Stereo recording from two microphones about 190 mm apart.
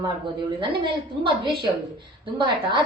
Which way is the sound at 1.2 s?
25° right (ahead or behind).